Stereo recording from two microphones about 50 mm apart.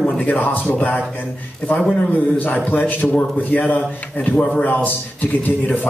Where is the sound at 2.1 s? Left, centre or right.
Left.